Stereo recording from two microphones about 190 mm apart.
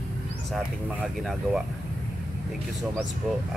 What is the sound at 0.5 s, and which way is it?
Speech, centre (ahead or behind).